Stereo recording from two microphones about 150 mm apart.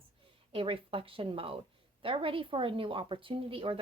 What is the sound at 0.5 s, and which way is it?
Speech, 35° right (ahead or behind).